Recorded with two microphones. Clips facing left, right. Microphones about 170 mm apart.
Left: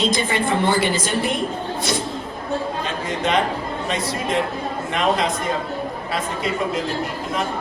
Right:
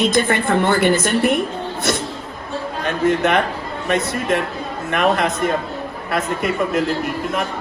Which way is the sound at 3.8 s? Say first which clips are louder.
Right 6 dB; 55° right (ahead or behind).